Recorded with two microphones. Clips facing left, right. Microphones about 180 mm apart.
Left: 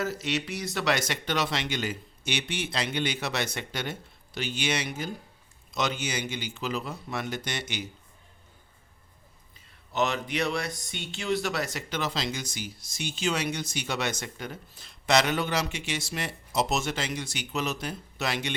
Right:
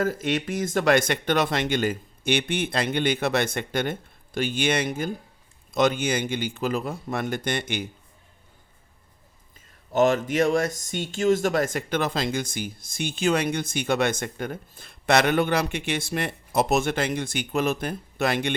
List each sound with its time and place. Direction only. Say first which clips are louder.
0.0 s speech: right 5 dB; 50° right (ahead or behind)
9.9 s speech: right 8 dB; 50° right (ahead or behind)